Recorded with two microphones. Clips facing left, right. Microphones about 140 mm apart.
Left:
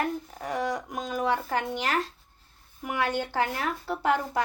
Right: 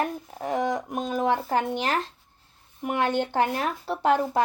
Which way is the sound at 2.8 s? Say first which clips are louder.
Right 4 dB; 25° right (ahead or behind).